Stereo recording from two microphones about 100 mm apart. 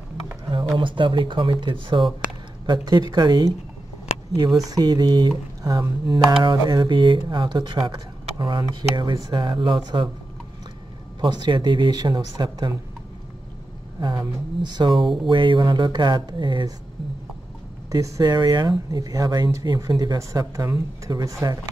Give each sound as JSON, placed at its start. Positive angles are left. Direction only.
{"t": 0.5, "sound": "speech", "side_deg": -55}
{"t": 2.6, "sound": "speech", "side_deg": -45}
{"t": 4.6, "sound": "speech", "side_deg": -40}
{"t": 11.1, "sound": "speech", "side_deg": -50}
{"t": 13.9, "sound": "speech", "side_deg": -45}
{"t": 17.9, "sound": "speech", "side_deg": -35}